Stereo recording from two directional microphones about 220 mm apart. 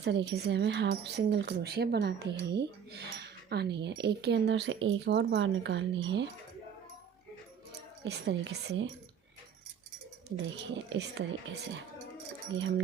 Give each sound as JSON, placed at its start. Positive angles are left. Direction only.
{"t": 0.0, "sound": "speech", "side_deg": -50}
{"t": 8.0, "sound": "speech", "side_deg": -50}
{"t": 10.8, "sound": "speech", "side_deg": -55}